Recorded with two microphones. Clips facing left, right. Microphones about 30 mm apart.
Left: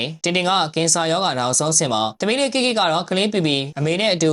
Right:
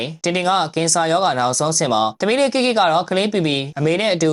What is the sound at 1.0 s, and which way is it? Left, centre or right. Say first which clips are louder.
Speech: right 5 dB; centre.